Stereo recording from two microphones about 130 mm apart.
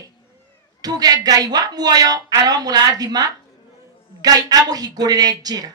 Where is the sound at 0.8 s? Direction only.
30° right (ahead or behind).